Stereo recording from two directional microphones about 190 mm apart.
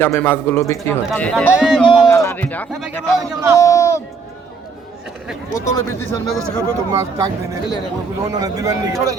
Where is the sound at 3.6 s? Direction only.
15° left (ahead or behind).